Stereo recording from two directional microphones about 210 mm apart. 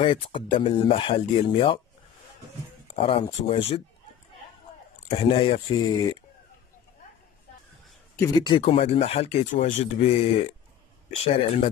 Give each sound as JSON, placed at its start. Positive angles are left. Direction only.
{"t": 0.0, "sound": "speech", "side_deg": 25}
{"t": 3.4, "sound": "speech", "side_deg": 25}
{"t": 5.1, "sound": "speech", "side_deg": 25}
{"t": 8.2, "sound": "speech", "side_deg": 20}